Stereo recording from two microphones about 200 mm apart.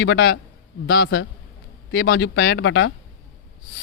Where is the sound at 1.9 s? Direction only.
60° left (ahead or behind).